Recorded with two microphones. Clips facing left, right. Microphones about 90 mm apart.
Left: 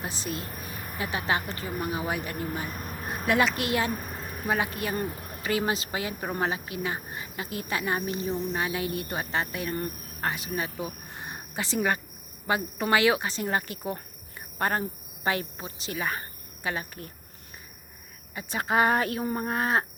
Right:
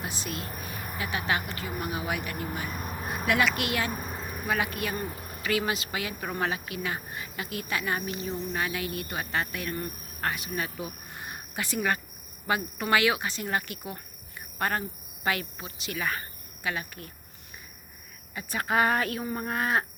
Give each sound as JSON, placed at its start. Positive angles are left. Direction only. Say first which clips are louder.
{"t": 0.0, "sound": "a woman's voice", "louder": "left 1 dB", "side_deg": 35}
{"t": 2.6, "sound": "music", "louder": "right 1 dB", "side_deg": -10}
{"t": 3.2, "sound": "speech", "louder": "left 2 dB", "side_deg": 35}
{"t": 3.9, "sound": "a sound", "louder": "even", "side_deg": -5}
{"t": 4.4, "sound": "speech", "louder": "left 1 dB", "side_deg": 30}
{"t": 5.0, "sound": "a sound", "louder": "left 2 dB", "side_deg": -5}
{"t": 5.4, "sound": "speech", "louder": "left 1 dB", "side_deg": 30}
{"t": 18.3, "sound": "speech", "louder": "left 1 dB", "side_deg": 25}